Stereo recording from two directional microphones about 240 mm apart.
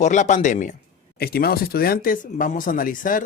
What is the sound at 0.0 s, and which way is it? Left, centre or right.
Speech, left.